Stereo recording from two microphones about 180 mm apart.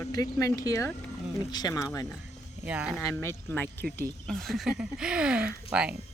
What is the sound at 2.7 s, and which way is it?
Speech, 5° right (ahead or behind).